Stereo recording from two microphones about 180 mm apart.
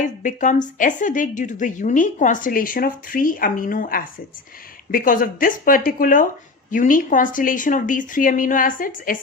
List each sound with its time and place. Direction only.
0.0 s a woman's voice: 45° left (ahead or behind)